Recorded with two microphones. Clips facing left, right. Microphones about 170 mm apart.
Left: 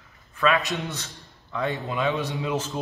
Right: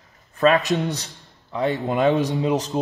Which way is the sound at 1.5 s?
20° right (ahead or behind).